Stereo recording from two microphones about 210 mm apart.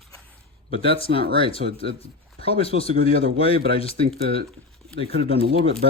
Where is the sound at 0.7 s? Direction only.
25° left (ahead or behind).